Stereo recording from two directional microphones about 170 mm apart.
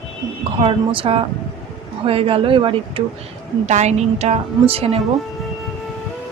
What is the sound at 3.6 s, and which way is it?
Speech, 40° right (ahead or behind).